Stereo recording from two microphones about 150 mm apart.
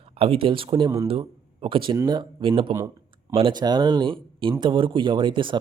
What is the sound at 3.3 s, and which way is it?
Speech, 30° right (ahead or behind).